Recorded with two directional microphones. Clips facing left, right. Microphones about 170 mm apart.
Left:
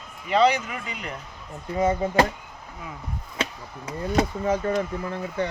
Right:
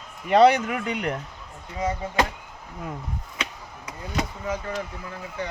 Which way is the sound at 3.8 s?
30° left (ahead or behind).